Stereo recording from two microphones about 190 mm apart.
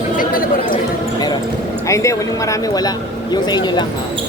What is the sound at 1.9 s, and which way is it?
Speech, 15° left (ahead or behind).